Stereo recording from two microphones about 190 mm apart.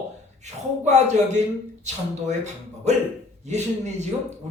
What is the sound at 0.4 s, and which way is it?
Speech, 40° right (ahead or behind).